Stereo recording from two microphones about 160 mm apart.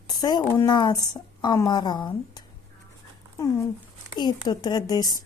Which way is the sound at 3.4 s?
20° left (ahead or behind).